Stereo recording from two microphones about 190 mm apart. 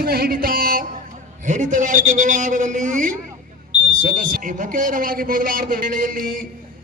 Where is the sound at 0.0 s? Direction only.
55° right (ahead or behind).